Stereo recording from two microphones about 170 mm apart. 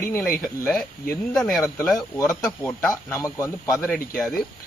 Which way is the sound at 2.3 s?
5° left (ahead or behind).